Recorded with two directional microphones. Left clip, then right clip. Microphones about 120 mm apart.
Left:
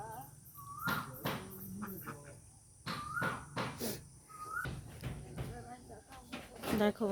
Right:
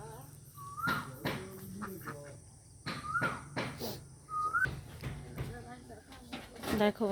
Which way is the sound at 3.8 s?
40° left (ahead or behind).